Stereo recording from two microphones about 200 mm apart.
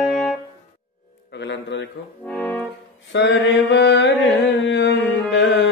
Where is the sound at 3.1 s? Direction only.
60° left (ahead or behind).